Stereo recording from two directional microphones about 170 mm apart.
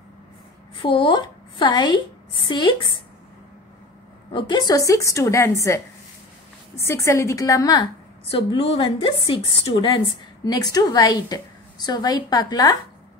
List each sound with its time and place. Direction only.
0.8 s a woman's voice: 30° left (ahead or behind)
4.3 s a woman's voice: 25° left (ahead or behind)
6.8 s a woman's voice: 15° left (ahead or behind)